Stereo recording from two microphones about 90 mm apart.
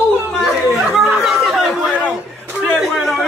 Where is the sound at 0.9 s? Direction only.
Centre (ahead or behind).